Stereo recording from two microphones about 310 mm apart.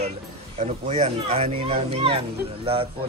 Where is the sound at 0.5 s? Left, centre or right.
Right.